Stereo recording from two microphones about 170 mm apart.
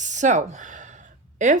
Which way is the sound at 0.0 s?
45° right (ahead or behind).